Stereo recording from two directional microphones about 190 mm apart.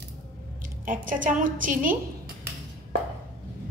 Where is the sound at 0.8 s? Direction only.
45° right (ahead or behind).